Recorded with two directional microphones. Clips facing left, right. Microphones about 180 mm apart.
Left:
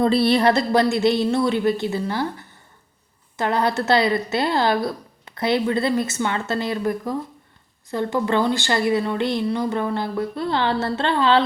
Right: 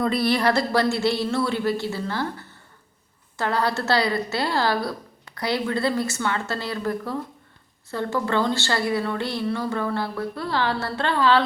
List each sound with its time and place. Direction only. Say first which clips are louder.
0.0 s a woman's voice: left 4 dB; 25° left (ahead or behind)
3.3 s a woman's voice: left 3 dB; 20° left (ahead or behind)